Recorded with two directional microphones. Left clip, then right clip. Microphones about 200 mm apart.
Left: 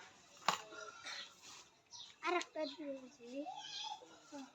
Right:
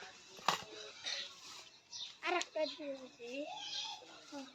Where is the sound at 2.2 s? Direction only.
50° left (ahead or behind).